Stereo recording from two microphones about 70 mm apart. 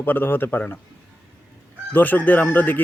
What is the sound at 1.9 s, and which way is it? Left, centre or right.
Speech, left.